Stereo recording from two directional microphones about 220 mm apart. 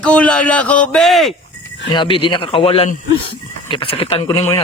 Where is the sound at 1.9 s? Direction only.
20° left (ahead or behind).